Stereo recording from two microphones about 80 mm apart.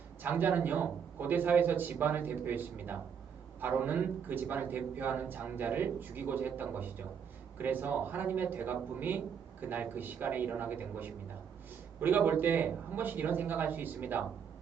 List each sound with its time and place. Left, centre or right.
0.2 s a man's voice: right